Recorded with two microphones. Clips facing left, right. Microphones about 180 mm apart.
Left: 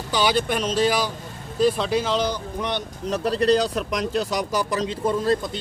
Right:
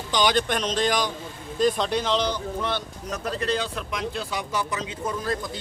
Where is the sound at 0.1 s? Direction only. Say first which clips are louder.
Left 1 dB; 5° left (ahead or behind).